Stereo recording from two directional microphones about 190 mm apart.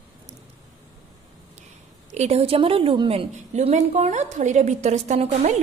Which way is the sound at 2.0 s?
35° right (ahead or behind).